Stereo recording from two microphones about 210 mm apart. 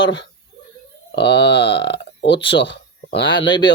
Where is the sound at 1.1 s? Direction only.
50° left (ahead or behind).